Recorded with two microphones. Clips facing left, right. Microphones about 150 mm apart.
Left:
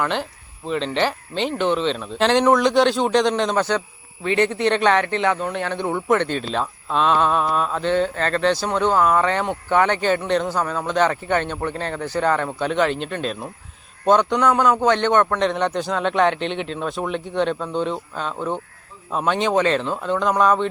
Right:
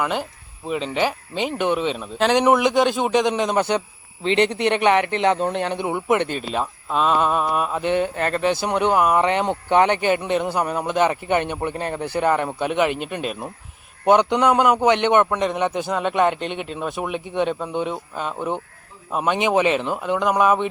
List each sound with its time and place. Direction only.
0.0 s speech: 10° right (ahead or behind)